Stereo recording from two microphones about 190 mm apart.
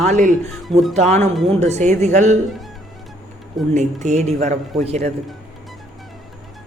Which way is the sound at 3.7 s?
35° right (ahead or behind).